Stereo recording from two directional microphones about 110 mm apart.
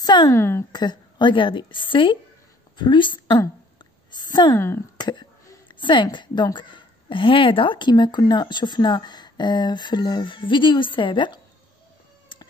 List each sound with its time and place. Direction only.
0.0 s a sound: 40° left (ahead or behind)
0.3 s a woman's voice: 25° left (ahead or behind)
0.7 s speech: 40° left (ahead or behind)
4.6 s a woman's voice: 25° left (ahead or behind)
4.9 s a woman's voice: 40° left (ahead or behind)